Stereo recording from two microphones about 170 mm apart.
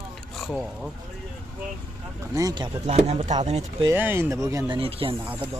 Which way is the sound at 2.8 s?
40° right (ahead or behind).